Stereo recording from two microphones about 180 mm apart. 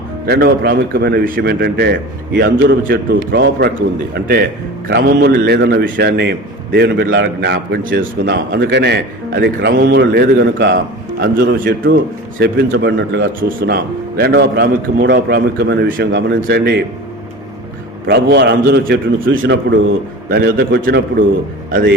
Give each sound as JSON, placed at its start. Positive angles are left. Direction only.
{"t": 0.3, "sound": "a man's voice", "side_deg": -65}
{"t": 2.4, "sound": "a man's voice", "side_deg": -85}
{"t": 2.8, "sound": "a man's voice", "side_deg": -55}
{"t": 18.0, "sound": "a man's voice", "side_deg": -65}
{"t": 21.7, "sound": "a man's voice", "side_deg": -55}